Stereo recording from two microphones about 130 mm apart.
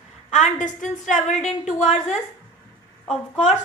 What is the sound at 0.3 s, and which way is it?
A woman's voice, 75° left (ahead or behind).